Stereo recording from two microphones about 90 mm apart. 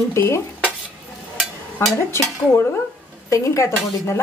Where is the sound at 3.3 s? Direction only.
35° left (ahead or behind).